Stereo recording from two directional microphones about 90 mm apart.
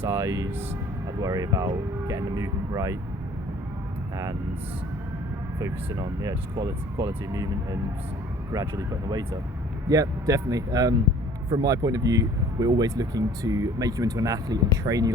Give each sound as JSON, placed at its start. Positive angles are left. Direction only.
{"t": 0.0, "sound": "speech", "side_deg": -40}
{"t": 5.5, "sound": "speech", "side_deg": -40}
{"t": 8.6, "sound": "speech", "side_deg": -45}